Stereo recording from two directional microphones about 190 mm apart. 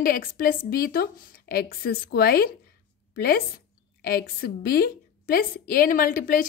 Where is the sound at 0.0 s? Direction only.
45° left (ahead or behind).